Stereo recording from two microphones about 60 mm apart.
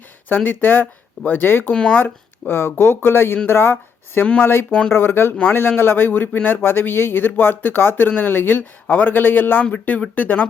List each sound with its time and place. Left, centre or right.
0.3 s speech: left
1.7 s speech: centre
2.0 s speech: left